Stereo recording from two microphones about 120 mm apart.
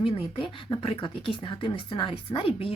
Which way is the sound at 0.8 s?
50° left (ahead or behind).